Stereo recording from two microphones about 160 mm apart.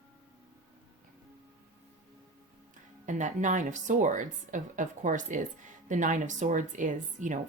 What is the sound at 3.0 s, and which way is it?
Speech, 50° right (ahead or behind).